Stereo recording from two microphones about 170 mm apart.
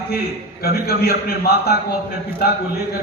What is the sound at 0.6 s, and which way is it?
A man's voice, 65° left (ahead or behind).